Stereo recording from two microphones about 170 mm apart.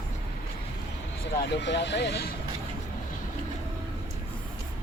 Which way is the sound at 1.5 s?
90° left.